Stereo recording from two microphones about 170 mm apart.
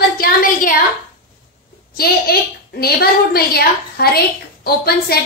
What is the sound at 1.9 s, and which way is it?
A woman's voice, 65° left (ahead or behind).